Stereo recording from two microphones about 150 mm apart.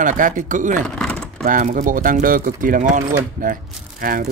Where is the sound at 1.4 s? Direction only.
60° right (ahead or behind).